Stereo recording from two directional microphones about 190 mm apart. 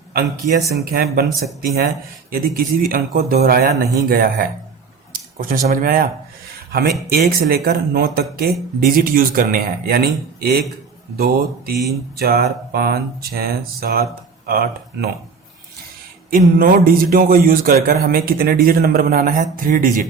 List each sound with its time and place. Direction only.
0.1 s speech: 50° right (ahead or behind)
7.1 s speech: 50° right (ahead or behind)
16.3 s speech: 50° right (ahead or behind)